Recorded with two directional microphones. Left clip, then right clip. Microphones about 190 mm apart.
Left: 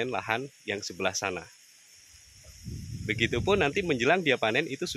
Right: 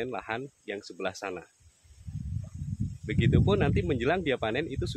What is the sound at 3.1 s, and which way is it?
Speech, 20° left (ahead or behind).